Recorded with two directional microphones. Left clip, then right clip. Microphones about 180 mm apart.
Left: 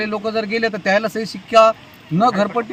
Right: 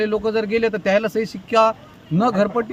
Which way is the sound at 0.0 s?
15° right (ahead or behind).